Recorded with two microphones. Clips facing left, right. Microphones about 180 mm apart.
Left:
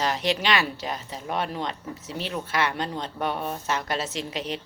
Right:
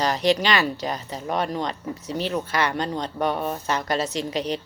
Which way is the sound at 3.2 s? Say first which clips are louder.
Right 4 dB; 40° right (ahead or behind).